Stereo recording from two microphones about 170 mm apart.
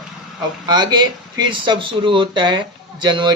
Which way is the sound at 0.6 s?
25° right (ahead or behind).